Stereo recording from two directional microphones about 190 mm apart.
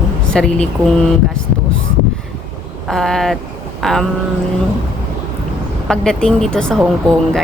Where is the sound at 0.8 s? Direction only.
15° right (ahead or behind).